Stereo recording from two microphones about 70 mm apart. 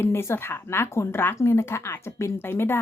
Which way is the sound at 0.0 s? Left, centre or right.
Left.